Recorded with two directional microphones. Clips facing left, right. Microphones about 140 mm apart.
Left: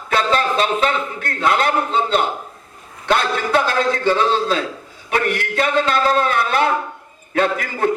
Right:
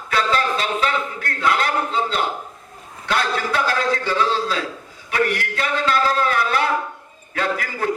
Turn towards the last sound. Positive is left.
turn(degrees=25)  # may be behind; listen again after turning